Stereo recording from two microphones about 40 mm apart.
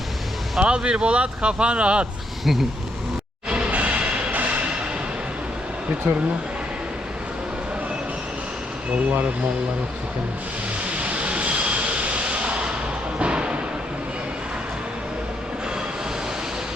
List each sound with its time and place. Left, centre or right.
0.6 s speech: right
2.4 s speech: centre
3.7 s music: right
11.0 s train: right
12.3 s a sound: right
13.1 s music: right